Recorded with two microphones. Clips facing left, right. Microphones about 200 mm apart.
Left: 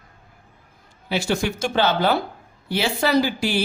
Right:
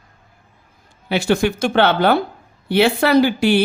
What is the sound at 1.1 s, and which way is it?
Speech, 60° right (ahead or behind).